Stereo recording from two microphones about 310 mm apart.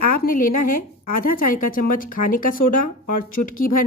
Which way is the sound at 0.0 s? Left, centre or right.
Left.